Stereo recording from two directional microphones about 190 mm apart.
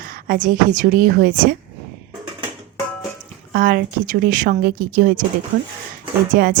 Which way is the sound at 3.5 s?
50° right (ahead or behind).